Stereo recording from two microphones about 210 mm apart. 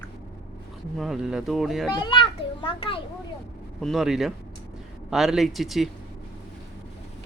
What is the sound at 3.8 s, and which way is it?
Speech, centre (ahead or behind).